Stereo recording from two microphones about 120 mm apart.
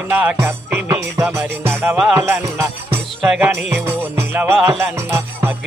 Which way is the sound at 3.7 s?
15° right (ahead or behind).